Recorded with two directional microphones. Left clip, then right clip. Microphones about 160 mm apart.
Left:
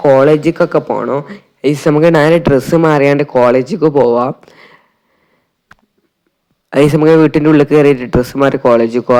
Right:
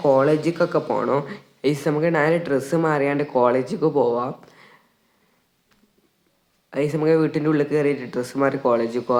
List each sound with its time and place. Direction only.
0.0 s speech: 35° left (ahead or behind)
3.2 s speech: 35° left (ahead or behind)
6.7 s a man's voice: 50° left (ahead or behind)